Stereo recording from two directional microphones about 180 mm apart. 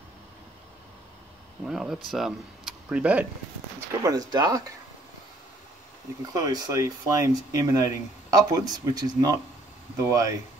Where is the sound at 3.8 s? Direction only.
20° right (ahead or behind).